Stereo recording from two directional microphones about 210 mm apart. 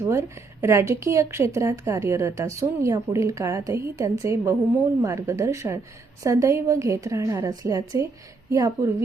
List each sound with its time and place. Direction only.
0.0 s speech: 15° right (ahead or behind)